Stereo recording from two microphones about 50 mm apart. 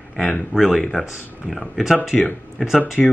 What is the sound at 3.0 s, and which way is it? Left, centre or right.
Speech, centre.